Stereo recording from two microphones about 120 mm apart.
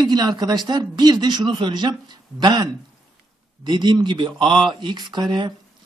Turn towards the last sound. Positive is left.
turn(degrees=-40)  # may be behind; listen again after turning